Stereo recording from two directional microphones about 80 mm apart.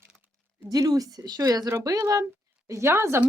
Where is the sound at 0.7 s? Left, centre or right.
Right.